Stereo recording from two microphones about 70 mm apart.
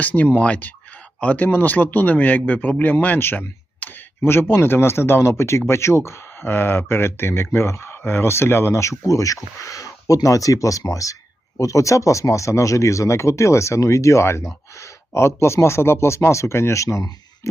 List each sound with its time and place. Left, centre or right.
0.0 s speech: left